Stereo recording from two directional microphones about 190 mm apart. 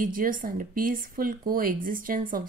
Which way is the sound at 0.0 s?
45° right (ahead or behind).